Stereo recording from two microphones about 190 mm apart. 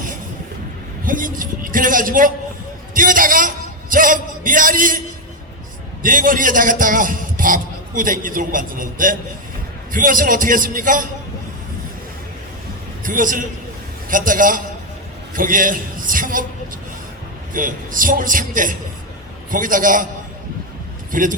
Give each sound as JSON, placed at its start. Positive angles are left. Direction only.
{"t": 1.0, "sound": "a man's voice", "side_deg": -45}
{"t": 2.9, "sound": "a sound", "side_deg": -45}
{"t": 6.0, "sound": "a man's voice", "side_deg": -45}
{"t": 13.1, "sound": "a man's voice", "side_deg": -45}
{"t": 17.5, "sound": "a man's voice", "side_deg": -45}
{"t": 21.1, "sound": "speech", "side_deg": -45}